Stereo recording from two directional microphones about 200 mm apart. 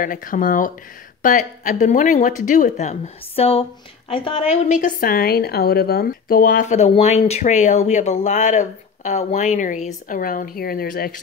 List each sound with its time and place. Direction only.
0.0 s a woman's voice: 45° left (ahead or behind)